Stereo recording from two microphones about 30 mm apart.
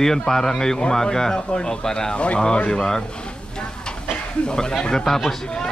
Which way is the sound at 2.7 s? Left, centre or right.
Left.